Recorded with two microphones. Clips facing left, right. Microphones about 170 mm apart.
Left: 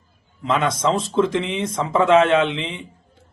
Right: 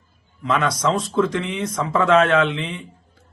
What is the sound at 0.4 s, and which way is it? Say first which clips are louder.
Speech: left 1 dB; 20° left (ahead or behind).